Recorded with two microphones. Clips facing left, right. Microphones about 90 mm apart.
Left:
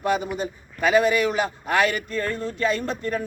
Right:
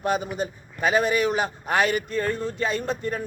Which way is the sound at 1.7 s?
30° right (ahead or behind).